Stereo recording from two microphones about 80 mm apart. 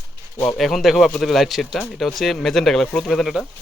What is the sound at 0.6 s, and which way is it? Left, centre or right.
Speech, centre.